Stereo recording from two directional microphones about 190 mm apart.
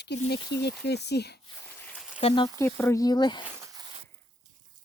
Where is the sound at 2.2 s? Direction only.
25° left (ahead or behind).